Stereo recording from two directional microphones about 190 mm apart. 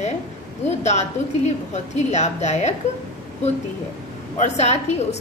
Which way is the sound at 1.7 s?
35° left (ahead or behind).